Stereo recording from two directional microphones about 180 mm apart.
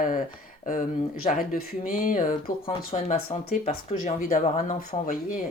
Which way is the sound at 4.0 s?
45° left (ahead or behind).